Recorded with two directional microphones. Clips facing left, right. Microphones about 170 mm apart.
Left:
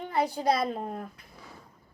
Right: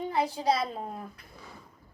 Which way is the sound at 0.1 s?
60° left (ahead or behind).